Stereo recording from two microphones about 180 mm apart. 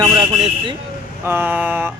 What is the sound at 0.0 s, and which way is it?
Vehicle, 20° right (ahead or behind).